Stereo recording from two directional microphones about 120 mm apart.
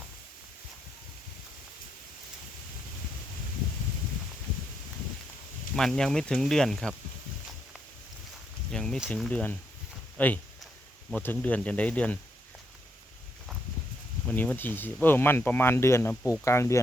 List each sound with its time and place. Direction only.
5.7 s speech: 5° left (ahead or behind)
8.7 s a sound: 5° left (ahead or behind)
9.3 s speech: 10° left (ahead or behind)
14.3 s speech: 15° left (ahead or behind)